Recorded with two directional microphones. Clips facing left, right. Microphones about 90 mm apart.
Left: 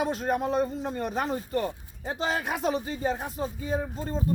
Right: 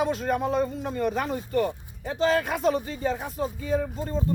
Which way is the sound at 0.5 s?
30° left (ahead or behind).